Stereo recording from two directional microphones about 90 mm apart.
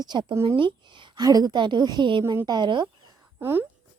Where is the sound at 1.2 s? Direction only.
45° right (ahead or behind).